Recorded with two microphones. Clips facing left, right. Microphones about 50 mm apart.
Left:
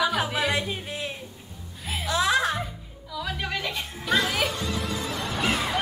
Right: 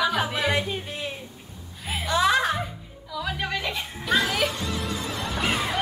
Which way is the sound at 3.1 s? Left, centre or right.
Centre.